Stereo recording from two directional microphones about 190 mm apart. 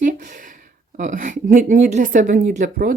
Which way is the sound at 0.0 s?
45° right (ahead or behind).